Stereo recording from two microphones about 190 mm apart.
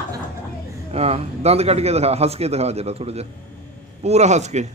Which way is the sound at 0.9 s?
35° right (ahead or behind).